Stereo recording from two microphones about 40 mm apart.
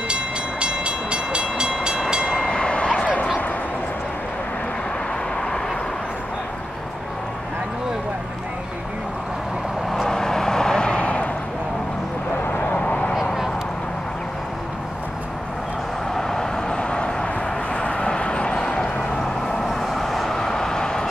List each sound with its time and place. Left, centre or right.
0.1 s train: right
2.3 s a sound: left
10.0 s vehicle: centre; by 11.2 s left
12.4 s vehicle: left
12.8 s vehicle: left
13.1 s a sound: centre
16.2 s vehicle: centre
19.6 s vehicle: centre
20.3 s vehicle: centre